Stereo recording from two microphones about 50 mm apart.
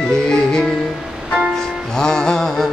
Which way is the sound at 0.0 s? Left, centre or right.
Centre.